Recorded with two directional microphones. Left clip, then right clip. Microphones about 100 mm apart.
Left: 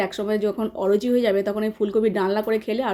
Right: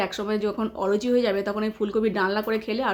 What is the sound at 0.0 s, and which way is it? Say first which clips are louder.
Speech: left 3 dB; 35° left (ahead or behind).